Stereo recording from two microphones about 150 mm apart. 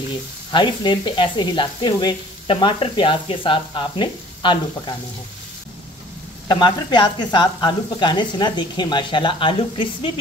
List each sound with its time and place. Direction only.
0.5 s speech: 30° left (ahead or behind)
6.4 s speech: 30° left (ahead or behind)